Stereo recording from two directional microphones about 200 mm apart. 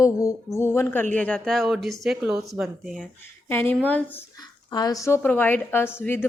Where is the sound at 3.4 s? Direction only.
10° left (ahead or behind).